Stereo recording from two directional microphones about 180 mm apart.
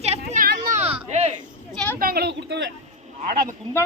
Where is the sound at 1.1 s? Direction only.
35° right (ahead or behind).